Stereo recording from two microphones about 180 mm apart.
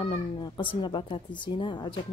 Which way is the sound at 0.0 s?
30° left (ahead or behind).